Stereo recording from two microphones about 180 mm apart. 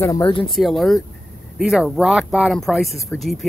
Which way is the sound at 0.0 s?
20° left (ahead or behind).